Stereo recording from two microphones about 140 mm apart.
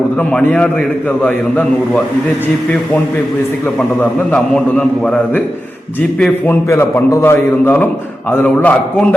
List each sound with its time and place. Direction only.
0.2 s a man's voice: 10° left (ahead or behind)
3.8 s a man's voice: 5° left (ahead or behind)
6.5 s a man's voice: 15° left (ahead or behind)